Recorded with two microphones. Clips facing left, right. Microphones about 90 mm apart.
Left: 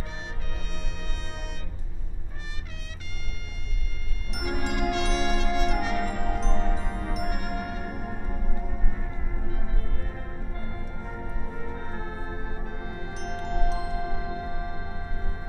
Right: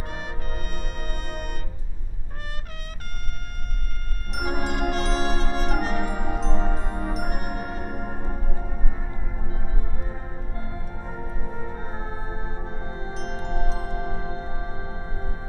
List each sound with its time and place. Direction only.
0.1 s music: 50° right (ahead or behind)
4.4 s music: 40° right (ahead or behind)
6.0 s music: 10° right (ahead or behind)
7.2 s music: 40° right (ahead or behind)
8.8 s music: 10° right (ahead or behind)
9.5 s music: 20° right (ahead or behind)
13.1 s music: centre (ahead or behind)
14.1 s music: 30° right (ahead or behind)